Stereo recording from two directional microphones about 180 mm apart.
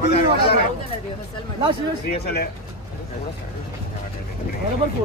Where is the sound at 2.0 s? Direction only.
60° left (ahead or behind).